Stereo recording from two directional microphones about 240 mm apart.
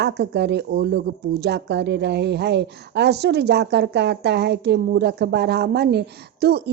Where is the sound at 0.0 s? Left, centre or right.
Right.